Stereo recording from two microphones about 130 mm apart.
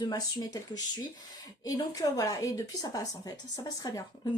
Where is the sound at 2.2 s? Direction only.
25° left (ahead or behind).